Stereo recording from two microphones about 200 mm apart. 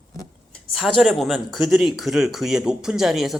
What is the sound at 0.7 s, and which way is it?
Speech, centre (ahead or behind).